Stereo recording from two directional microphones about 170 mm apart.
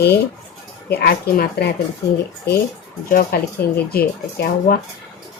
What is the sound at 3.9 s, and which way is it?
Speech, 65° left (ahead or behind).